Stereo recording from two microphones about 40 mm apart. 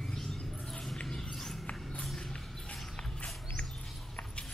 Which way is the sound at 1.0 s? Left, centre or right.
Centre.